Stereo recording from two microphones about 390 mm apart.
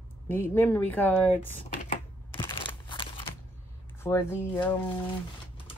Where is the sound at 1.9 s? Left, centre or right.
Centre.